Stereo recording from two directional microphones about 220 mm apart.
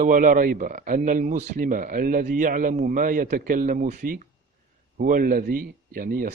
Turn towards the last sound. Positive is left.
turn(degrees=-40)  # may be behind; listen again after turning